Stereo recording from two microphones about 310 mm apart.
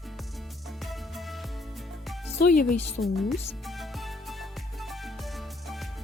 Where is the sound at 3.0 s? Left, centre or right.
Left.